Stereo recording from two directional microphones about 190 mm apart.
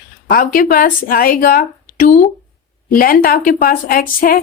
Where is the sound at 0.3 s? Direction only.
45° left (ahead or behind).